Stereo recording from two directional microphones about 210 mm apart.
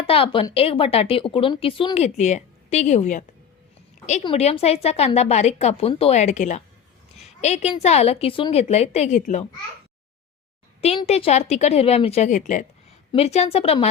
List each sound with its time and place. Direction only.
0.1 s a woman's voice: 25° left (ahead or behind)
10.8 s a woman's voice: 30° left (ahead or behind)